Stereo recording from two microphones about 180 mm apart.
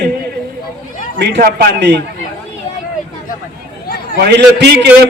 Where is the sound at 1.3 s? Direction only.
55° right (ahead or behind).